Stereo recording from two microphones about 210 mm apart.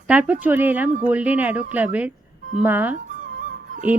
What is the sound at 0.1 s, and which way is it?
A woman's voice, 5° right (ahead or behind).